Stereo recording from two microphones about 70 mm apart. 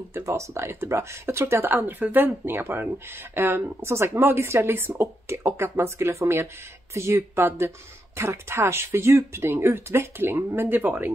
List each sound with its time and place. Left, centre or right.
0.1 s speech: right